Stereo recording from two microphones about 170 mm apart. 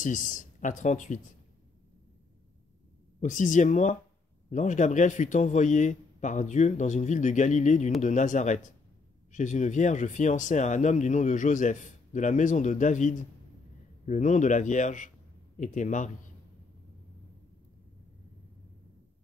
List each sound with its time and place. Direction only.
0.0 s speech: 50° left (ahead or behind)
3.2 s speech: 45° left (ahead or behind)